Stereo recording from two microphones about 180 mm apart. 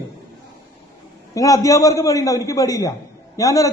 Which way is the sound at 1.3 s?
20° left (ahead or behind).